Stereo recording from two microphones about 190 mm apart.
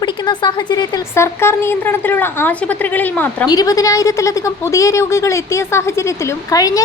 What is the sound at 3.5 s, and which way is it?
A woman's voice, 20° left (ahead or behind).